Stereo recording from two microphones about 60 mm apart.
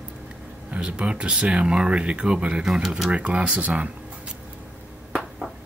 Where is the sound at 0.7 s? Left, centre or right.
Centre.